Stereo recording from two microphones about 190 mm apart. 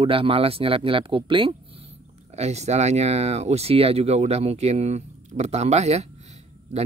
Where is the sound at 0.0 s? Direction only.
30° right (ahead or behind).